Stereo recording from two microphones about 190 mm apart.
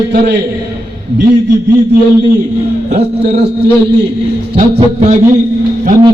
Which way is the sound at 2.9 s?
55° right (ahead or behind).